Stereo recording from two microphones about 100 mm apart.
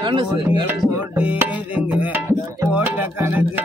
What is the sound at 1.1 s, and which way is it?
Music, 15° right (ahead or behind).